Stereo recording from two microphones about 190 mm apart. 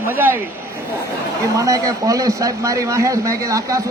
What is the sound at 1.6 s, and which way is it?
A man's voice, 15° right (ahead or behind).